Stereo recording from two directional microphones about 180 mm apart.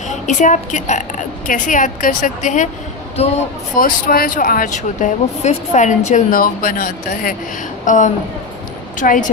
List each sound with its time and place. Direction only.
0.1 s a woman's voice: 45° left (ahead or behind)
3.8 s a woman's voice: 50° left (ahead or behind)